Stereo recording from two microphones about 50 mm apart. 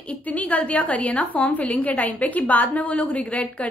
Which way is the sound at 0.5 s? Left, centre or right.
Left.